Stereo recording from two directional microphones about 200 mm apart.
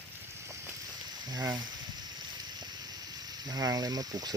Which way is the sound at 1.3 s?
20° right (ahead or behind).